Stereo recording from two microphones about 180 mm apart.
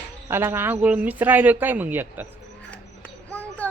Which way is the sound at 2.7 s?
5° left (ahead or behind).